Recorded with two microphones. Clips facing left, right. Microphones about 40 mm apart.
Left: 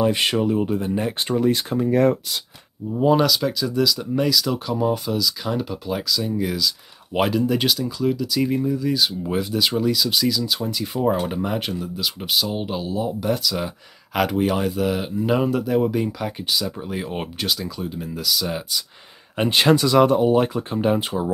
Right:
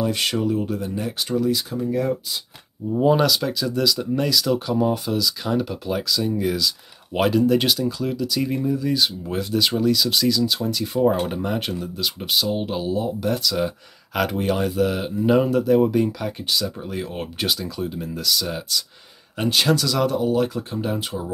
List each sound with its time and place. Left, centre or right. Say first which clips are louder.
0.0 s speech: left 3 dB; left
2.9 s speech: even; centre
17.4 s speech: right 3 dB; centre
19.3 s speech: left 3 dB; left